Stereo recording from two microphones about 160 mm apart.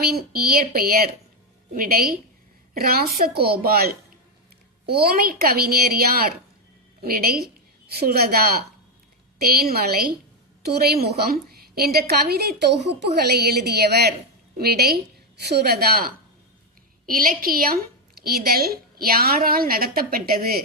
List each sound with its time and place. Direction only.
0.0 s a woman's voice: 75° right (ahead or behind); by 14.1 s 90° right
14.6 s a woman's voice: 75° right (ahead or behind)